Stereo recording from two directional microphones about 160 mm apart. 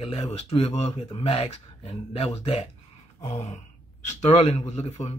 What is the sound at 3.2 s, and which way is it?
Gasp, 45° left (ahead or behind).